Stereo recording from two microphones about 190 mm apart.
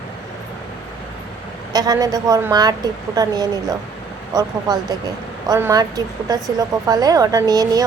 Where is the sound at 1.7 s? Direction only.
20° right (ahead or behind).